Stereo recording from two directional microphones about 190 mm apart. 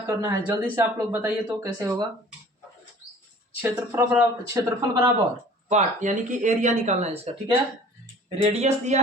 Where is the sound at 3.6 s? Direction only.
10° right (ahead or behind).